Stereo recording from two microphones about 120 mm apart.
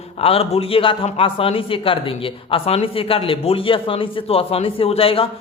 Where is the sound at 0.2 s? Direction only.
55° left (ahead or behind).